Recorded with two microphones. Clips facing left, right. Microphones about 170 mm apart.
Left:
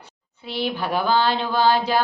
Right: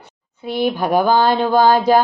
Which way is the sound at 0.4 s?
50° right (ahead or behind).